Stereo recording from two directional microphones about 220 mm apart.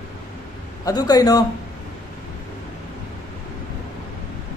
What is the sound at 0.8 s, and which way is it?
Speech, 15° left (ahead or behind).